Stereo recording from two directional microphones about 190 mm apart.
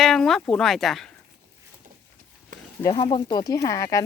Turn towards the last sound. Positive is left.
turn(degrees=15)  # may be behind; listen again after turning